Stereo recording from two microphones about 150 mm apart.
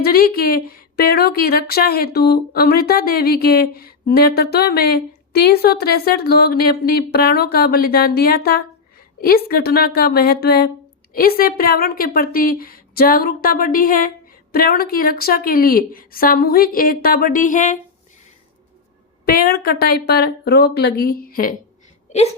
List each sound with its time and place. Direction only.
0.0 s a woman's voice: 85° left
11.1 s a woman's voice: 75° left (ahead or behind); by 17.7 s 60° left (ahead or behind)
19.2 s a woman's voice: 85° left